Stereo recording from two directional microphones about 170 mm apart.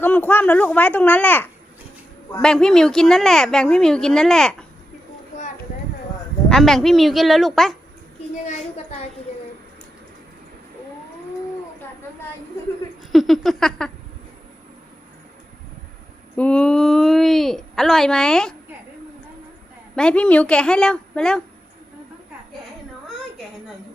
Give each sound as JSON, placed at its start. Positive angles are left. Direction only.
{"t": 0.0, "sound": "a woman's voice", "side_deg": 10}
{"t": 6.5, "sound": "a woman's voice", "side_deg": 0}
{"t": 8.4, "sound": "a sound", "side_deg": 45}
{"t": 13.1, "sound": "a woman's voice", "side_deg": 0}
{"t": 16.4, "sound": "a woman's voice", "side_deg": 5}
{"t": 20.0, "sound": "a woman's voice", "side_deg": 5}